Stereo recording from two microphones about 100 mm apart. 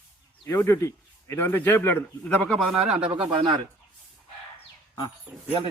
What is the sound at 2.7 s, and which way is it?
Speech, 10° right (ahead or behind).